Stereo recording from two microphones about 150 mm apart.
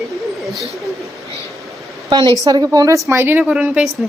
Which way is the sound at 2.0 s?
25° right (ahead or behind).